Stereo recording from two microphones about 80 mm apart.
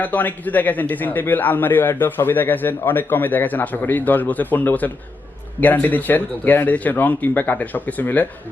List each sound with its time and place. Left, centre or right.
0.0 s a man's voice: left